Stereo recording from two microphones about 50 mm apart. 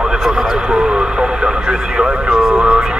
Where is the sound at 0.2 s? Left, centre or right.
Centre.